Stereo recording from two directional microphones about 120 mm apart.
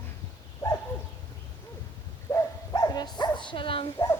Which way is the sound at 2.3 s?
25° left (ahead or behind).